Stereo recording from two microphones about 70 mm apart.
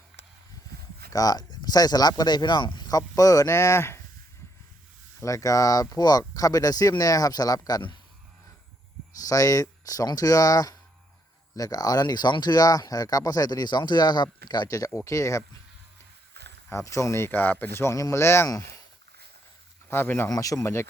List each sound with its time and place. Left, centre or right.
1.1 s speech: left
3.4 s speech: left
5.2 s speech: left
9.2 s speech: left
16.6 s speech: left
17.7 s speech: left
19.9 s speech: left
20.3 s speech: left